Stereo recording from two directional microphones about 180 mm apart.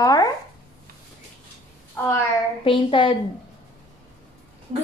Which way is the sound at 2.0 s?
10° left (ahead or behind).